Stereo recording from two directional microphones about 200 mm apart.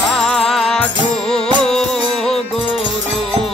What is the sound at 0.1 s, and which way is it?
Music, centre (ahead or behind).